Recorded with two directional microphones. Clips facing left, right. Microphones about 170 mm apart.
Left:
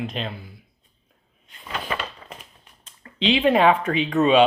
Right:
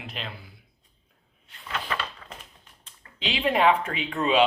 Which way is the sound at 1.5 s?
10° left (ahead or behind).